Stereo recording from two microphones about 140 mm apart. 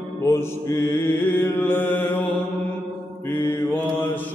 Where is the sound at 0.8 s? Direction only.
15° left (ahead or behind).